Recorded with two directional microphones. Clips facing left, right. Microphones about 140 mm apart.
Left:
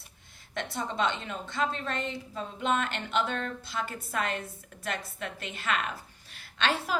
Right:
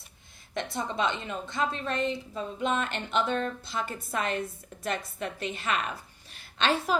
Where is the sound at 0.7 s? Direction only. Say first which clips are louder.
Even; 15° right (ahead or behind).